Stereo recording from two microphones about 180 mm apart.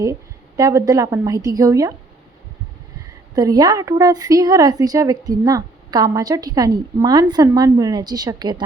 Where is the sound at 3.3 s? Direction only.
20° right (ahead or behind).